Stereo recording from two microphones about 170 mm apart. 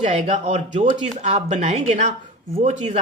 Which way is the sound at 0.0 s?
45° right (ahead or behind).